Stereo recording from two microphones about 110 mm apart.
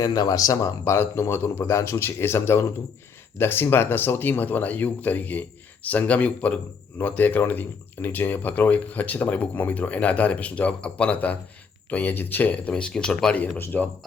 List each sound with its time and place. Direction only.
0.0 s speech: 35° left (ahead or behind); by 13.9 s 10° left (ahead or behind)